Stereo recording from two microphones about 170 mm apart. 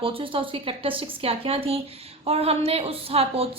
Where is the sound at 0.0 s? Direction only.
30° right (ahead or behind).